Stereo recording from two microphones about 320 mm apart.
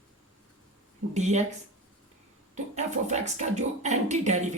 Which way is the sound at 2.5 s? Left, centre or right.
Right.